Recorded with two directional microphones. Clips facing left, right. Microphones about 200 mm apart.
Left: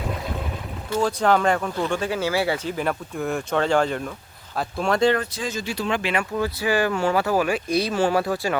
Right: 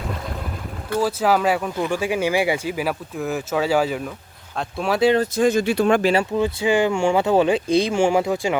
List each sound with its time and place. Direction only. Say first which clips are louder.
0.9 s speech: right 1 dB; 5° right (ahead or behind)
5.2 s speech: right 11 dB; 50° right (ahead or behind)
6.3 s speech: right 4 dB; 20° right (ahead or behind)